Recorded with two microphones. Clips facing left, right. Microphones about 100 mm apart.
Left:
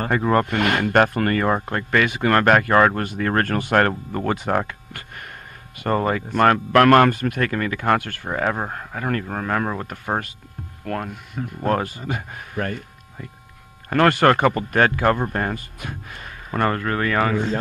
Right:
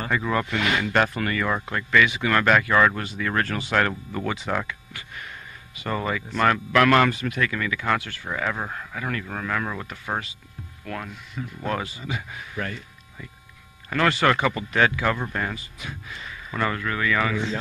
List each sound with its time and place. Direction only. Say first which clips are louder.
0.0 s speech: left 6 dB; 50° left (ahead or behind)